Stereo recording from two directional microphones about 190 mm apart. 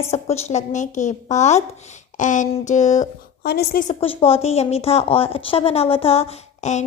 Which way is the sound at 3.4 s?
55° left (ahead or behind).